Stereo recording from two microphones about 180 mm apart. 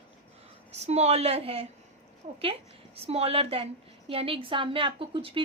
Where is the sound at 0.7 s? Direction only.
35° right (ahead or behind).